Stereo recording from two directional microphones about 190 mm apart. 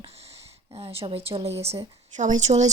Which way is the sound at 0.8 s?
30° right (ahead or behind).